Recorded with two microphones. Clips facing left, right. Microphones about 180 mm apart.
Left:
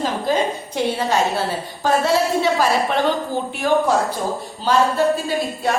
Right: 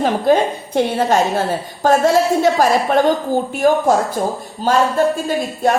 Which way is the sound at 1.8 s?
45° right (ahead or behind).